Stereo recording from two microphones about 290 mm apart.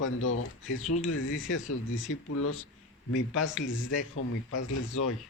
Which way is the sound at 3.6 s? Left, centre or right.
Left.